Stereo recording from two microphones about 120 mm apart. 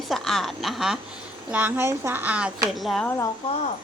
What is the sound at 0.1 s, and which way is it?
Speech, centre (ahead or behind).